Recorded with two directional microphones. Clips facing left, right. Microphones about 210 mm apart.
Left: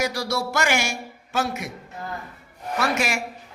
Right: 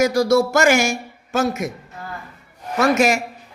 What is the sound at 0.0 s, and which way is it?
A man's voice, 45° right (ahead or behind).